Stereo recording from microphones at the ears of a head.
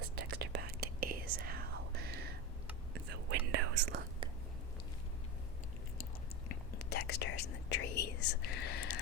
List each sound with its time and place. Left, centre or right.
0.0 s whispering: right
6.5 s whispering: left